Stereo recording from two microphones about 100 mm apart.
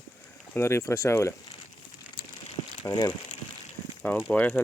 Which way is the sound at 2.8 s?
40° left (ahead or behind).